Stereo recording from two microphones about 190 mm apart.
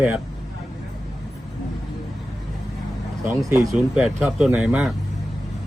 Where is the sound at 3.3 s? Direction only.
15° right (ahead or behind).